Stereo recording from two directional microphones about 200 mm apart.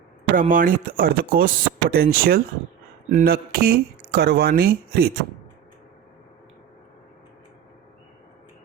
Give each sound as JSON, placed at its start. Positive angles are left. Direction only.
{"t": 0.3, "sound": "speech", "side_deg": -40}